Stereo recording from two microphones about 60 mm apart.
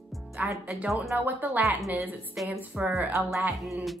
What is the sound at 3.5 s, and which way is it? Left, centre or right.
Music, centre.